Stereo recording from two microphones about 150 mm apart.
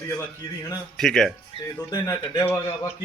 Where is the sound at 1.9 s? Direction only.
25° left (ahead or behind).